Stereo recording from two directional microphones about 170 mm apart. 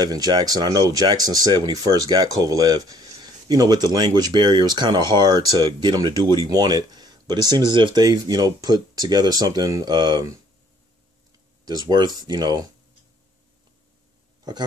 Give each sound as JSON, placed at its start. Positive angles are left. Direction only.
{"t": 0.0, "sound": "speech", "side_deg": -25}
{"t": 11.6, "sound": "speech", "side_deg": -25}